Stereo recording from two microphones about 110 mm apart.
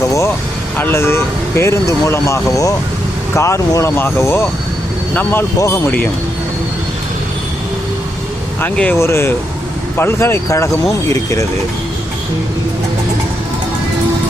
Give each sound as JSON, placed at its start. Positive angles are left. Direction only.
{"t": 0.1, "sound": "vehicle", "side_deg": 25}
{"t": 0.8, "sound": "speech", "side_deg": 20}
{"t": 8.6, "sound": "speech", "side_deg": 15}